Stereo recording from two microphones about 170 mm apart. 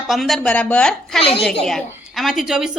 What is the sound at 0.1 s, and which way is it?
Speech, centre (ahead or behind).